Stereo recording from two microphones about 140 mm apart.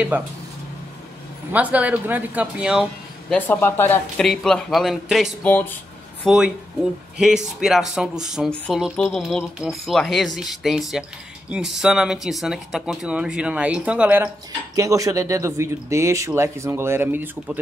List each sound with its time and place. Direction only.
1.5 s speech: 10° right (ahead or behind)
2.8 s speech: 10° left (ahead or behind)
4.2 s speech: 5° left (ahead or behind)
5.4 s speech: 15° left (ahead or behind)
6.2 s speech: 5° right (ahead or behind)
14.8 s speech: 25° right (ahead or behind)